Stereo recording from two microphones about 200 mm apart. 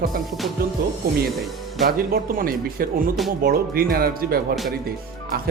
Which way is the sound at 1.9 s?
45° right (ahead or behind).